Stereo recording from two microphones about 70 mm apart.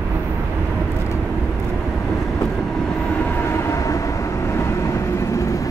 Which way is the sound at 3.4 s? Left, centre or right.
Left.